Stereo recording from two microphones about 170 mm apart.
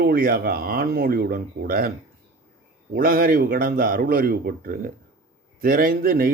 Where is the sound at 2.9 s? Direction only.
60° right (ahead or behind).